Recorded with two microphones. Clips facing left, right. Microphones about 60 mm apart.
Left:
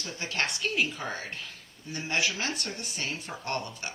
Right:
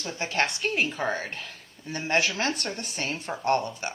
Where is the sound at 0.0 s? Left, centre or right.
Right.